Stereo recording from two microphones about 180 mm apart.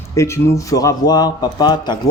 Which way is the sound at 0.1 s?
15° left (ahead or behind).